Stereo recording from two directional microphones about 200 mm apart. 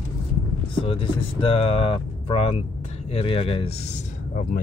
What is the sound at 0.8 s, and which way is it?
Speech, 25° left (ahead or behind).